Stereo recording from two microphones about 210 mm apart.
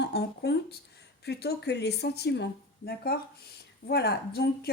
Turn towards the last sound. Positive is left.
turn(degrees=50)  # may be behind; listen again after turning